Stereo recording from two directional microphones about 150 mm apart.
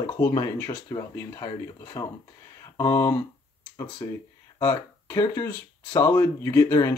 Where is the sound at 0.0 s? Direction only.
25° left (ahead or behind).